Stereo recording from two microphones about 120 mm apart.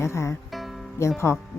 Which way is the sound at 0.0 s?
25° left (ahead or behind).